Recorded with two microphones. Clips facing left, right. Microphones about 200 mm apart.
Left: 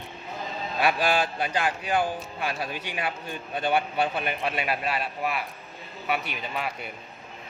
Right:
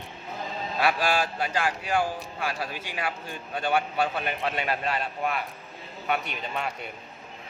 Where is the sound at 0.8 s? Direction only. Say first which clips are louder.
Left 1 dB; 15° left (ahead or behind).